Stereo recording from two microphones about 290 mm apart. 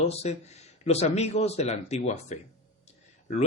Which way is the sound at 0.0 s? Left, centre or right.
Left.